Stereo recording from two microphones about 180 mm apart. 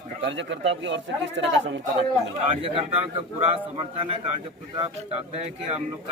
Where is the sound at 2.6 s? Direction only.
30° right (ahead or behind).